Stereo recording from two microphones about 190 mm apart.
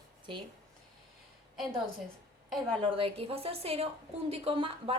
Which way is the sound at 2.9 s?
30° right (ahead or behind).